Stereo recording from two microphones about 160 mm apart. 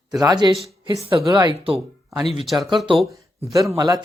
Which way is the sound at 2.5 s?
Centre (ahead or behind).